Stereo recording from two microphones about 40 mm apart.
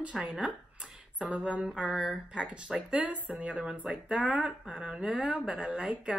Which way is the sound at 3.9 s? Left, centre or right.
Right.